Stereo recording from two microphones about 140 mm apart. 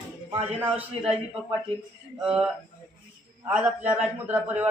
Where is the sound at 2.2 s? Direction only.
5° right (ahead or behind).